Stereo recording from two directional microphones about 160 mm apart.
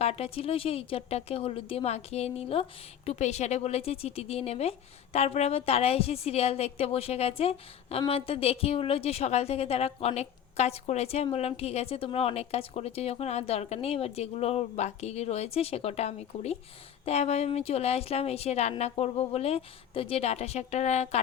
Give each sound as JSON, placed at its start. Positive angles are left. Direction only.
{"t": 0.0, "sound": "a woman's voice", "side_deg": 40}